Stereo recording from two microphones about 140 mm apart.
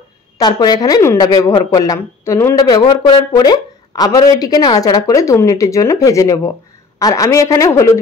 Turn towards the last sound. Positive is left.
turn(degrees=25)  # may be behind; listen again after turning